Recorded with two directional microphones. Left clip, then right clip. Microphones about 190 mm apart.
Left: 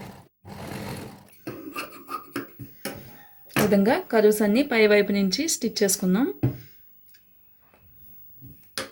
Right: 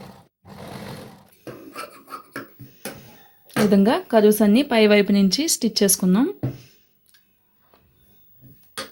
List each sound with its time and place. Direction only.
3.7 s speech: 35° right (ahead or behind)